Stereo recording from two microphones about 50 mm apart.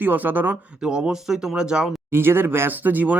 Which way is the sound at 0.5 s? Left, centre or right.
Right.